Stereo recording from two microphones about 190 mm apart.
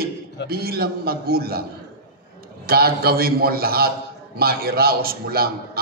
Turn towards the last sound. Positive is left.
turn(degrees=-55)  # may be behind; listen again after turning